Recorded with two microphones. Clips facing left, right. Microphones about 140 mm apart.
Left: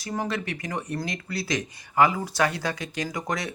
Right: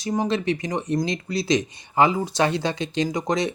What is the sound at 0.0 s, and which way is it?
Speech, 20° right (ahead or behind).